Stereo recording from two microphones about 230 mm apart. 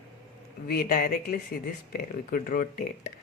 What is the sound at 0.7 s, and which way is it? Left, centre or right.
Speech, left.